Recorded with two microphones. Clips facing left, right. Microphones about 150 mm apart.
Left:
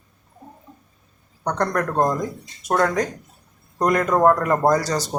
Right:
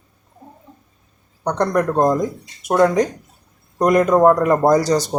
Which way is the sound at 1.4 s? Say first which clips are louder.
Right 4 dB; 15° right (ahead or behind).